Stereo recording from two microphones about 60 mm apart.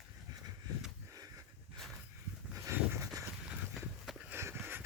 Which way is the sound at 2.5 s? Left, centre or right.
Right.